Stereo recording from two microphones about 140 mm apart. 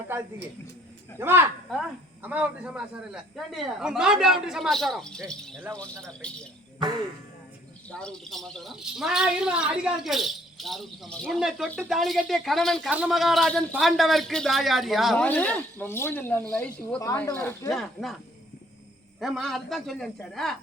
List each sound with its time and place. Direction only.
1.2 s speech: 15° right (ahead or behind); by 6.5 s 5° left (ahead or behind)
7.9 s speech: 5° left (ahead or behind)
17.7 s speech: centre (ahead or behind)
19.2 s speech: centre (ahead or behind)